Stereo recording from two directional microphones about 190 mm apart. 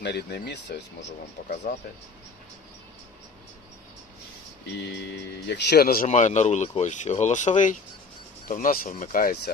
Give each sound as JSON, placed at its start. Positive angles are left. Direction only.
{"t": 0.0, "sound": "speech", "side_deg": 65}
{"t": 1.7, "sound": "speech", "side_deg": 50}
{"t": 4.8, "sound": "speech", "side_deg": 65}
{"t": 6.1, "sound": "speech", "side_deg": 40}